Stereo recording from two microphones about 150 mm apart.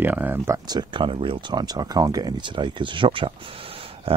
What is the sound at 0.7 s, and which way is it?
Speech, 30° right (ahead or behind).